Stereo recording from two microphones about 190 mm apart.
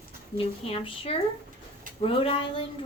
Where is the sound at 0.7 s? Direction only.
30° left (ahead or behind).